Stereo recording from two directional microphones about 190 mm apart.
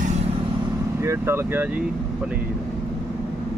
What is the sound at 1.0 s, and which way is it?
Speech, 15° right (ahead or behind).